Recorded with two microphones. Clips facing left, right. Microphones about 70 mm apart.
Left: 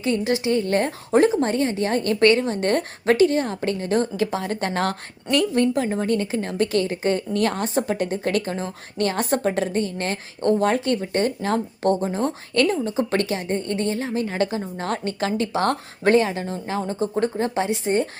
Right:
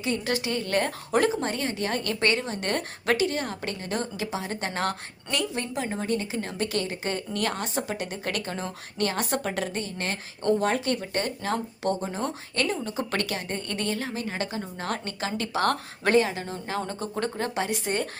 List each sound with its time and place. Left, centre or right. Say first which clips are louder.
0.3 s a woman's voice: left 7 dB; left
16.8 s a woman's voice: left 7 dB; centre